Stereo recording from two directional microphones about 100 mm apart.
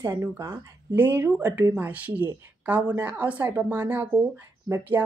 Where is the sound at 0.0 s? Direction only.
25° right (ahead or behind).